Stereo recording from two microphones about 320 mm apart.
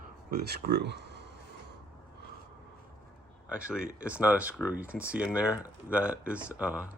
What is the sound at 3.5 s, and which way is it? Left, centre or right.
Speech, centre.